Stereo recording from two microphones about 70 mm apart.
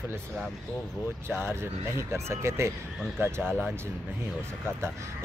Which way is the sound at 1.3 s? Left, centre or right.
Right.